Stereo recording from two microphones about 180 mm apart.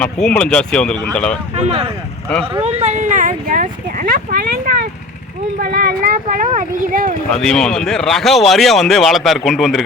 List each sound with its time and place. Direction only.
0.0 s speech: 5° left (ahead or behind)
1.5 s speech: 35° right (ahead or behind)
7.3 s speech: 5° left (ahead or behind)